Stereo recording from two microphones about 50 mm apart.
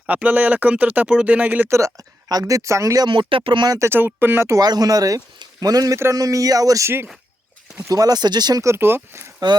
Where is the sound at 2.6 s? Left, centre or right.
Right.